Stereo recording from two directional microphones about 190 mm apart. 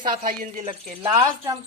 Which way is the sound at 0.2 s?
45° right (ahead or behind).